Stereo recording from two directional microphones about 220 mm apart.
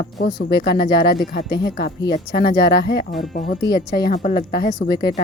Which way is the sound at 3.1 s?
30° left (ahead or behind).